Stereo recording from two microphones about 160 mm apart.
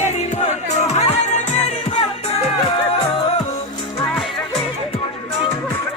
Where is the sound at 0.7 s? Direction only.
45° left (ahead or behind).